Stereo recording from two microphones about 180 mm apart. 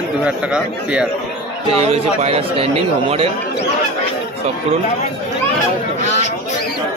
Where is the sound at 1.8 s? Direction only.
35° right (ahead or behind).